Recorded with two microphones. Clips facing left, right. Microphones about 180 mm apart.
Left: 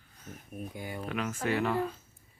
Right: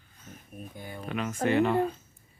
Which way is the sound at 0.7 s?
15° left (ahead or behind).